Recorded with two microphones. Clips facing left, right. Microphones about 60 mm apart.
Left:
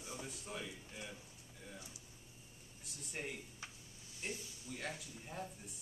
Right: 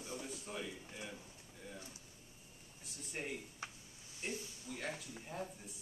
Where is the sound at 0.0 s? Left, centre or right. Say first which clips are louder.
Right 2 dB; centre.